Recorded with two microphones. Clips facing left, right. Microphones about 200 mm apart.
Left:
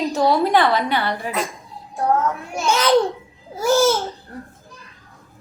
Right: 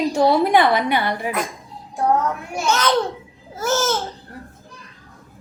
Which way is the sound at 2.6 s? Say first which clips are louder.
Left 3 dB; 10° left (ahead or behind).